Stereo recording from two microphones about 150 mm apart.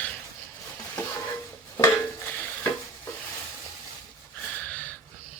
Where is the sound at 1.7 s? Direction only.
15° left (ahead or behind).